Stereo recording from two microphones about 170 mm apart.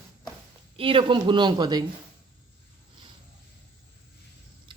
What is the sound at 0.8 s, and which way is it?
Speech, 30° right (ahead or behind).